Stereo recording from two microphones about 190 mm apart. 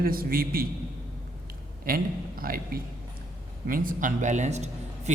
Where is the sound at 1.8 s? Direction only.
50° right (ahead or behind).